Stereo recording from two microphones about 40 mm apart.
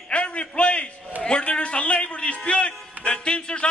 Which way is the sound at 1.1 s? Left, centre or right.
Right.